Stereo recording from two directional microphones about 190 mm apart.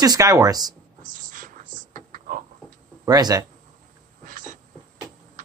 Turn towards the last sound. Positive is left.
turn(degrees=-45)  # may be behind; listen again after turning